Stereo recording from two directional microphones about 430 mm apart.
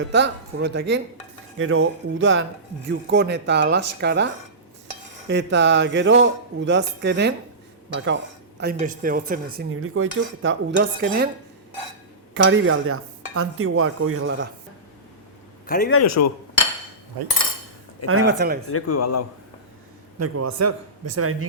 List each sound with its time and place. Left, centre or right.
0.0 s speech: right
5.3 s speech: right
12.3 s speech: right
15.6 s a man's voice: centre
16.0 s a man's voice: left
17.2 s cutlery: right
18.0 s speech: right
18.7 s a man's voice: left
20.1 s speech: right